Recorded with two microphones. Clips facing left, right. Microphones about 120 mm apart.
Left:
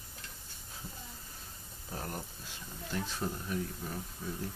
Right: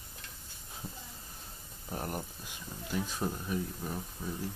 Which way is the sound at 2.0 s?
15° right (ahead or behind).